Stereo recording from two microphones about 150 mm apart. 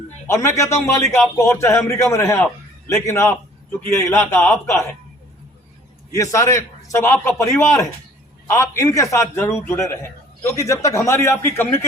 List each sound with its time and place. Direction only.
0.3 s a man's voice: 20° left (ahead or behind)
6.1 s a man's voice: 20° left (ahead or behind)